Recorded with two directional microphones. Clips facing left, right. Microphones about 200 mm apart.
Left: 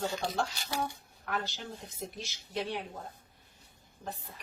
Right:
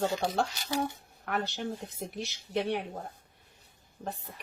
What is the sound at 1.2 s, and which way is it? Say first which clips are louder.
Speech: right 4 dB; 60° right (ahead or behind).